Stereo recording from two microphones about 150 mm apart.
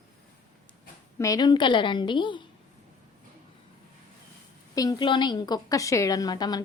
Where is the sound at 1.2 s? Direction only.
25° left (ahead or behind).